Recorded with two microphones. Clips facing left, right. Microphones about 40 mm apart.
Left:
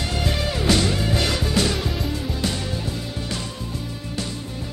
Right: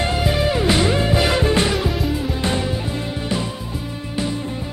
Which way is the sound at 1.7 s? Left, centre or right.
Centre.